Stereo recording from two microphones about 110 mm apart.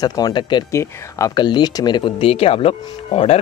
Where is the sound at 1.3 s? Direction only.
40° left (ahead or behind).